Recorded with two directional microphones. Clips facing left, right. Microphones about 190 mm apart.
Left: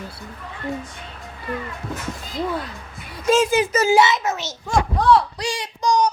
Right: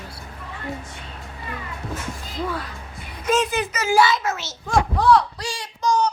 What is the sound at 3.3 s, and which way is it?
A child's voice, 30° left (ahead or behind).